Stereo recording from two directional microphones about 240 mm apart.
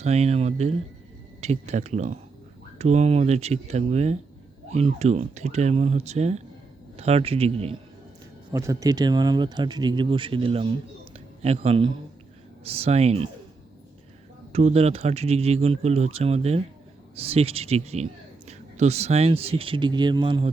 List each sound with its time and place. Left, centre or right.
0.0 s speech: right
8.5 s speech: centre
14.5 s speech: right